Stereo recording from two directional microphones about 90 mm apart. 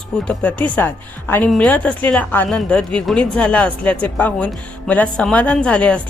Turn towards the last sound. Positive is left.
turn(degrees=10)  # may be behind; listen again after turning